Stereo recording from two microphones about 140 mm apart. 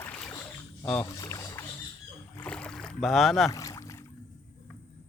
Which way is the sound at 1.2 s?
20° left (ahead or behind).